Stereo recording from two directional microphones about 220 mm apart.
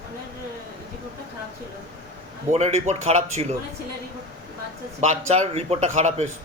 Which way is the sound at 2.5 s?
30° right (ahead or behind).